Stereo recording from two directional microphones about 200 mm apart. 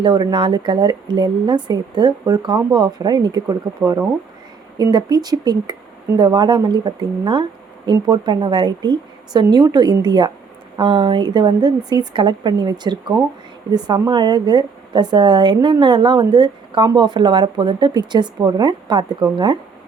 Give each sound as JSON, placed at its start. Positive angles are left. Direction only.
{"t": 0.0, "sound": "a woman's voice", "side_deg": -20}
{"t": 4.8, "sound": "a woman's voice", "side_deg": -20}